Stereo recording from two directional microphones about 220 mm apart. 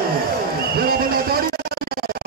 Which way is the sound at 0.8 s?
45° right (ahead or behind).